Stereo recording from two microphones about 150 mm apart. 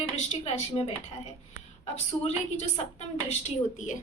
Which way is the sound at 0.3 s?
50° left (ahead or behind).